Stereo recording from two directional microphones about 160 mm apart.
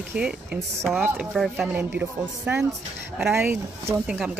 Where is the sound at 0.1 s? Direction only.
10° right (ahead or behind).